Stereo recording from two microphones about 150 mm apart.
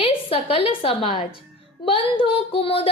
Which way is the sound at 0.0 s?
40° left (ahead or behind).